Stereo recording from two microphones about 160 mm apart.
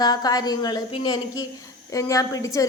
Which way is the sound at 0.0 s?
25° left (ahead or behind).